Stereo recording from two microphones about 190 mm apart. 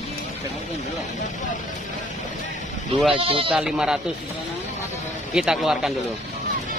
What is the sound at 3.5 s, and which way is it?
Speech, 5° right (ahead or behind).